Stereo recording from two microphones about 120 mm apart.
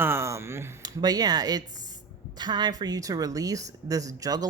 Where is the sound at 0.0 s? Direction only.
20° right (ahead or behind).